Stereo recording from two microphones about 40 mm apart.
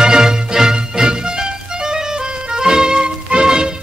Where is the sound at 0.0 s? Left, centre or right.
Centre.